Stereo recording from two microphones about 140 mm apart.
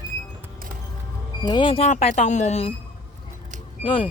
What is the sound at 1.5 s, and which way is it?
Speech, 35° left (ahead or behind).